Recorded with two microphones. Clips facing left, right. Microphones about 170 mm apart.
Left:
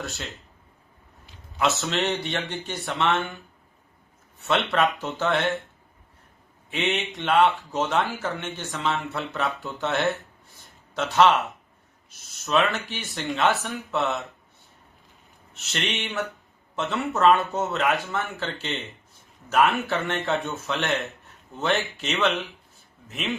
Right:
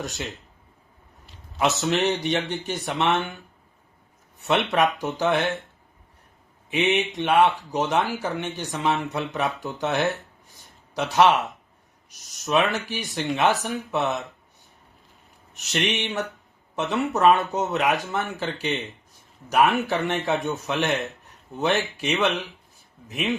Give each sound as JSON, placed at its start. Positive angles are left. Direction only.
{"t": 0.0, "sound": "speech", "side_deg": -15}
{"t": 1.8, "sound": "speech", "side_deg": -15}
{"t": 4.4, "sound": "speech", "side_deg": -15}
{"t": 6.7, "sound": "speech", "side_deg": -15}
{"t": 10.5, "sound": "a sound", "side_deg": -15}
{"t": 12.0, "sound": "speech", "side_deg": -15}
{"t": 15.7, "sound": "speech", "side_deg": -15}